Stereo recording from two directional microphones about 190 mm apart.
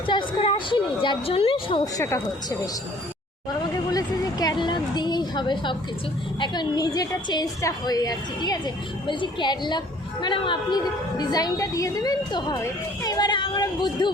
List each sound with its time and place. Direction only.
0.1 s a woman's voice: 25° left (ahead or behind)
3.9 s a woman's voice: 20° left (ahead or behind)
13.0 s a sound: 20° left (ahead or behind)